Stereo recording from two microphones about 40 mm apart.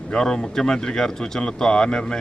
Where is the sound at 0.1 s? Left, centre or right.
Centre.